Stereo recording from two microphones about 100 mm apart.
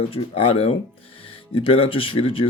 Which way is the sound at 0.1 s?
70° left (ahead or behind).